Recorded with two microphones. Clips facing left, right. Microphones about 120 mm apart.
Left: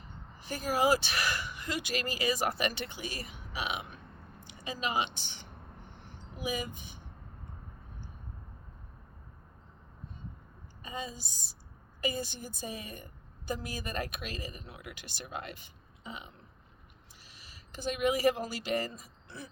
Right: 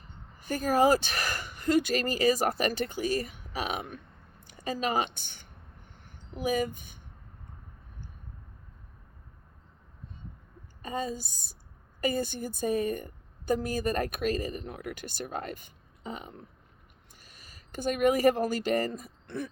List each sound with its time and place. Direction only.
0.4 s a woman's voice: 45° right (ahead or behind)
10.8 s a woman's voice: 45° right (ahead or behind)